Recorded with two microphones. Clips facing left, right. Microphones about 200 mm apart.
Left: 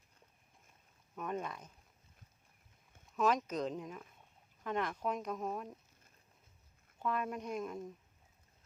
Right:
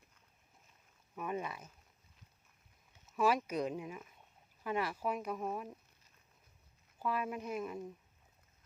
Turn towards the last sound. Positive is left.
turn(degrees=-5)  # may be behind; listen again after turning